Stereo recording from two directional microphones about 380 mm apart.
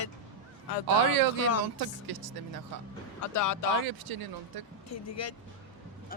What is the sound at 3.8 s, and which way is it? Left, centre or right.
Speech, right.